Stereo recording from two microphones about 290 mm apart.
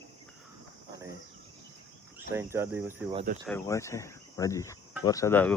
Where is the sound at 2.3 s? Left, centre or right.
Centre.